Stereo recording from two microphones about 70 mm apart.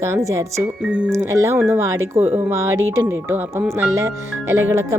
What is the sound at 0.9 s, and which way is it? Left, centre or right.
Speech, centre.